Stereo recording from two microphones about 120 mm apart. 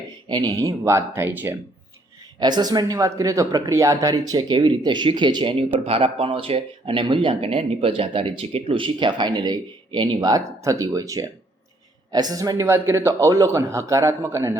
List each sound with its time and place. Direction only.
0.3 s a man's voice: 35° right (ahead or behind); by 1.5 s 15° right (ahead or behind)
2.4 s a man's voice: 35° right (ahead or behind)